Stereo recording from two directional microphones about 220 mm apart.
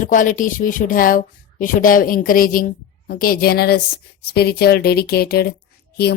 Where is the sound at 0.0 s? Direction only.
35° left (ahead or behind).